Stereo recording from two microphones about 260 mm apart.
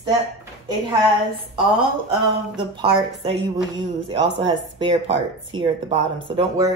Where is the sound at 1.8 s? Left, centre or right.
Centre.